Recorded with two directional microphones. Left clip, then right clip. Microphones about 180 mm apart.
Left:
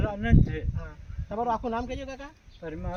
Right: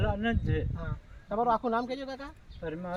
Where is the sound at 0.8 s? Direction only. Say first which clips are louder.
Right 2 dB; 15° left (ahead or behind).